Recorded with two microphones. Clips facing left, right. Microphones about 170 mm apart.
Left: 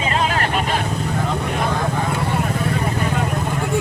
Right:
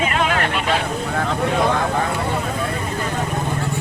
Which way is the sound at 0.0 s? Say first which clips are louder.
Right 1 dB; 30° left (ahead or behind).